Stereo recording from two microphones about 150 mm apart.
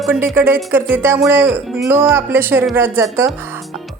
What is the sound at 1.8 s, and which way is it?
Speech, 15° right (ahead or behind).